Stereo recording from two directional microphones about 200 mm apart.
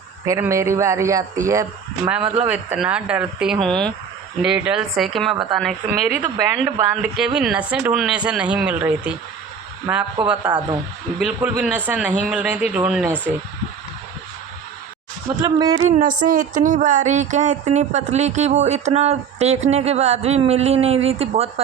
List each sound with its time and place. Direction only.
0.3 s a man's voice: 15° right (ahead or behind)
6.2 s a man's voice: 20° right (ahead or behind)
7.2 s a man's voice: 5° right (ahead or behind)
15.4 s speech: 20° right (ahead or behind)
15.9 s speech: 40° right (ahead or behind)